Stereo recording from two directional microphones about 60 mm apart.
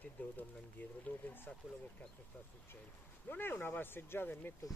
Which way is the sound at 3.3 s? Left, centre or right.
Left.